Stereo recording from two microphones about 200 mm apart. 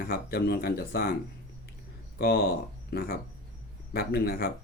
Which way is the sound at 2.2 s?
50° left (ahead or behind).